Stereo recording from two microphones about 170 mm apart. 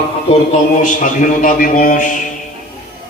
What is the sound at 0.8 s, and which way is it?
A woman's voice, 50° left (ahead or behind).